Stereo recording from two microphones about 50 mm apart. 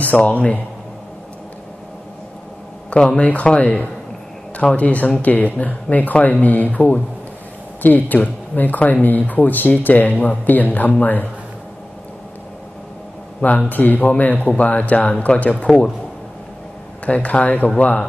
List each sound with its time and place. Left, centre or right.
0.0 s a man's voice: left
3.2 s speech: left
13.7 s speech: left
15.0 s speech: centre
17.0 s speech: left